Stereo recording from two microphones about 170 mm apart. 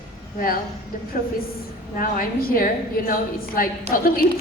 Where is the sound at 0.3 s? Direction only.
55° left (ahead or behind).